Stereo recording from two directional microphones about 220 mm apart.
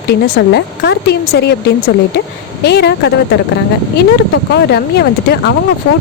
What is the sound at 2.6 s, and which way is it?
Speech, 50° left (ahead or behind).